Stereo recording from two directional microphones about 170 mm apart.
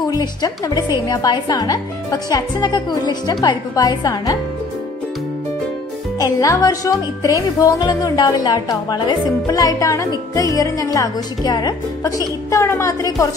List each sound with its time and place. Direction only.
0.1 s speech: 25° left (ahead or behind)
6.1 s speech: 20° left (ahead or behind)